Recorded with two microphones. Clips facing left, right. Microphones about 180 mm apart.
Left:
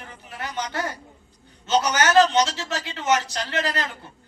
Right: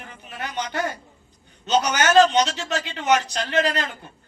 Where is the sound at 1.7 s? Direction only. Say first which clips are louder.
Right 1 dB; 20° right (ahead or behind).